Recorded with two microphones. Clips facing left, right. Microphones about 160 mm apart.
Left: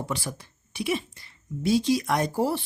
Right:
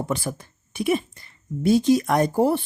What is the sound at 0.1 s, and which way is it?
Speech, 50° right (ahead or behind).